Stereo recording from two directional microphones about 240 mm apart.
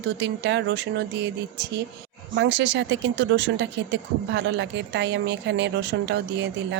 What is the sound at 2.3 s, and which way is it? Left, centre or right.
Speech, right.